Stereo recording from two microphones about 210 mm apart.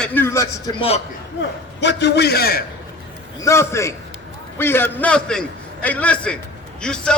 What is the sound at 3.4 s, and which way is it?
A man's voice, 15° left (ahead or behind).